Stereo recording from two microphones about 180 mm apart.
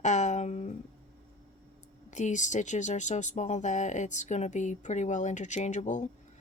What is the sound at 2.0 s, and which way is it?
Speech, 40° left (ahead or behind).